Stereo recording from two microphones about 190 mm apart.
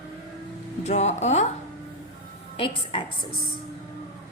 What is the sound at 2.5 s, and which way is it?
Speech, 30° left (ahead or behind).